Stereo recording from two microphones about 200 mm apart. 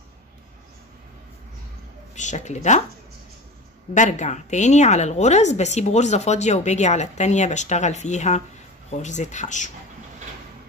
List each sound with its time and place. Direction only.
2.1 s a woman's voice: 35° left (ahead or behind)
3.9 s a woman's voice: 35° left (ahead or behind)